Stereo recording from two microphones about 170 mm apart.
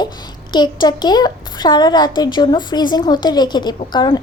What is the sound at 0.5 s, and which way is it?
A child's voice, 25° left (ahead or behind).